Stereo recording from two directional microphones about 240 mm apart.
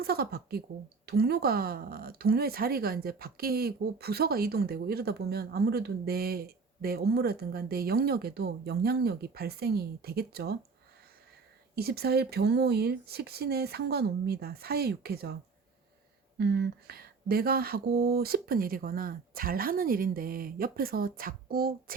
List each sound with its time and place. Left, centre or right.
0.0 s speech: right
11.7 s speech: right
16.4 s speech: right